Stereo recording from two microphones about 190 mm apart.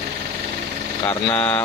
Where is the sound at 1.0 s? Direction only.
5° left (ahead or behind).